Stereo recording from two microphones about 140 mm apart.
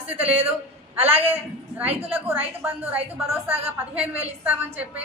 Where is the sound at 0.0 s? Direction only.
10° right (ahead or behind).